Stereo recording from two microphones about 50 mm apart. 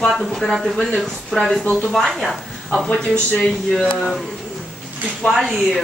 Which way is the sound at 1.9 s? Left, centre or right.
Centre.